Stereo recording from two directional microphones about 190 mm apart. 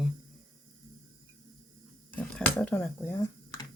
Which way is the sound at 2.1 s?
10° left (ahead or behind).